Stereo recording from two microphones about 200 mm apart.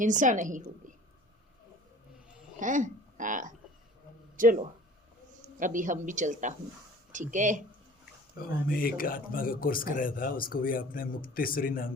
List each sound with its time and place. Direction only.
0.0 s a woman's voice: 40° right (ahead or behind)
2.6 s a woman's voice: 40° right (ahead or behind)
8.4 s speech: 45° left (ahead or behind)